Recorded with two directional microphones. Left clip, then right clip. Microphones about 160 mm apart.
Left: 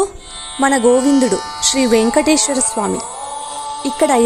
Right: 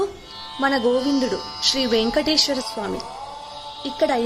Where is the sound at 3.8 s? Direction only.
60° left (ahead or behind).